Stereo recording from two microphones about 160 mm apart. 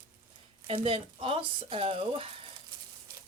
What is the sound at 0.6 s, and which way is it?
Speech, 35° right (ahead or behind).